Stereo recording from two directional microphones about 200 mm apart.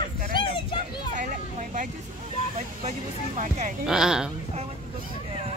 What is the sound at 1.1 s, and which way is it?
Vehicle, 40° right (ahead or behind).